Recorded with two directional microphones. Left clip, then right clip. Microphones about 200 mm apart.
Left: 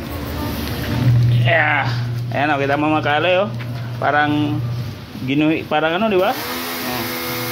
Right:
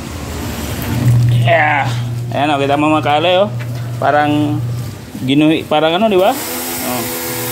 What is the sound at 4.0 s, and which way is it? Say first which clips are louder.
Speech: right 4 dB; 10° right (ahead or behind).